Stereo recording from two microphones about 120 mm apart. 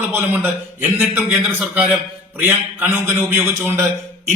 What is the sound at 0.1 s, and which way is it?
A man's voice, 15° right (ahead or behind).